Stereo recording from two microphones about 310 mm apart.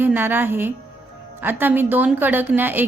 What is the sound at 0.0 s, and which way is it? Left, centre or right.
A woman's voice, centre.